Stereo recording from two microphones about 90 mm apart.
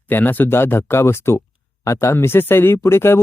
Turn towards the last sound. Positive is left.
turn(degrees=25)  # may be behind; listen again after turning